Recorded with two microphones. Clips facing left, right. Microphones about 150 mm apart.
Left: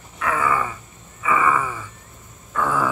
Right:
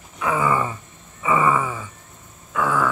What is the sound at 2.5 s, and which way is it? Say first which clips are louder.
Grunt: right 1 dB; centre (ahead or behind).